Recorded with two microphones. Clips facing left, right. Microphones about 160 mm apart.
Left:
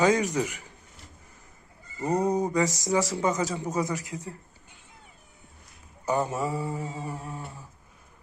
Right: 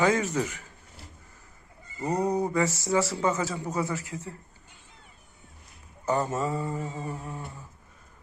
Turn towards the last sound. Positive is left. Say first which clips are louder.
# even
turn(degrees=10)  # may be behind; listen again after turning